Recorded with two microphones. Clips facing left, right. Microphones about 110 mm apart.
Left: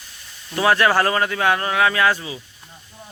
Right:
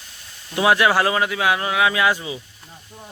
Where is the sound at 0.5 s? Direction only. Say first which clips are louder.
Even; 15° right (ahead or behind).